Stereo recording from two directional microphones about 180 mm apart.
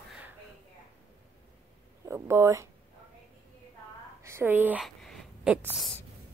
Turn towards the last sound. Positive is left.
turn(degrees=-5)  # may be behind; listen again after turning